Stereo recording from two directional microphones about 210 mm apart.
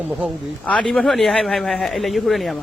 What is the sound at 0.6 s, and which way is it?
Speech, 5° left (ahead or behind).